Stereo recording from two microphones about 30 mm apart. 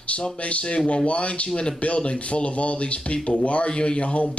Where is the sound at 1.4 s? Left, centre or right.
Left.